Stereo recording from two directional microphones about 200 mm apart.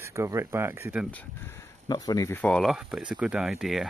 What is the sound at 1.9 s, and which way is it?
Speech, 20° left (ahead or behind).